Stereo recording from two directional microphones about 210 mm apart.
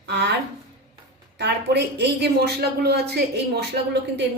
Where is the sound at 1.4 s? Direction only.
55° right (ahead or behind).